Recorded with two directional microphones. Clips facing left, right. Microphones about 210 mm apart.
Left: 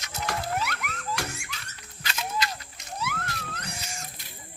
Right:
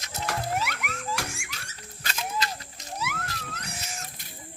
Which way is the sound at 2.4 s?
35° right (ahead or behind).